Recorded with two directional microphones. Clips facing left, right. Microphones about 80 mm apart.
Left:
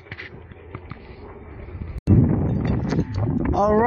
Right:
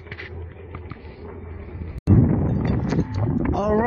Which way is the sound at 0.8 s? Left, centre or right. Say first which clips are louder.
Right 2 dB; centre.